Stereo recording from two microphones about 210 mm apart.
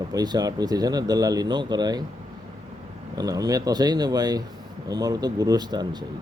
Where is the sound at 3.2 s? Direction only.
15° right (ahead or behind).